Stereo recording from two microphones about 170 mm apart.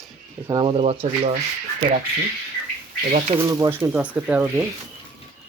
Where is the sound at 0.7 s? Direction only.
35° right (ahead or behind).